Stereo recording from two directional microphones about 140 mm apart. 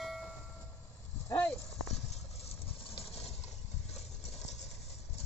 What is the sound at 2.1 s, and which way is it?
Vehicle, 50° left (ahead or behind).